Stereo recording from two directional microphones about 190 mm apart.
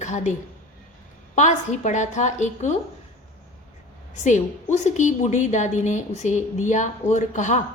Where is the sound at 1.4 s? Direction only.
40° left (ahead or behind).